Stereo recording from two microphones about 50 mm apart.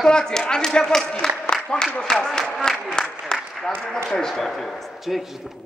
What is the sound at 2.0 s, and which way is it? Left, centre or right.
Speech, centre.